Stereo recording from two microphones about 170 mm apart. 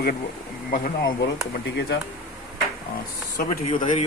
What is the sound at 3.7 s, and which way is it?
Speech, 45° left (ahead or behind).